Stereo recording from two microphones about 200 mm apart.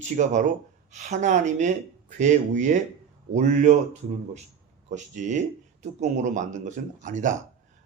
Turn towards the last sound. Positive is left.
turn(degrees=-40)  # may be behind; listen again after turning